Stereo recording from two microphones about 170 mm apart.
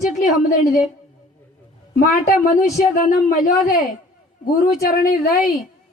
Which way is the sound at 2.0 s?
55° left (ahead or behind).